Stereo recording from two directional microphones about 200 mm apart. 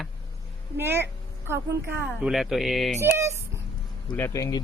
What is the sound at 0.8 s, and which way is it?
Speech, 10° right (ahead or behind).